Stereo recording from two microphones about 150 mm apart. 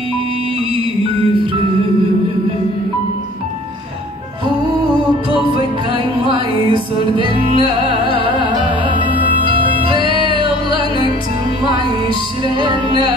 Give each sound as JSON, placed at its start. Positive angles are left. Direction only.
{"t": 6.3, "sound": "music", "side_deg": -35}
{"t": 7.6, "sound": "music", "side_deg": 35}
{"t": 12.5, "sound": "music", "side_deg": -35}